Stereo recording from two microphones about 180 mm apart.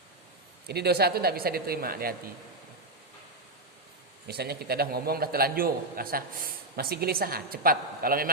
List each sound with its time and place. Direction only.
0.7 s a man's voice: 65° right (ahead or behind)
4.3 s a man's voice: 60° right (ahead or behind)